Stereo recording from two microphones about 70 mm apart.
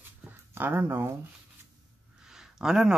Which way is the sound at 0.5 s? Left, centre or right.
Right.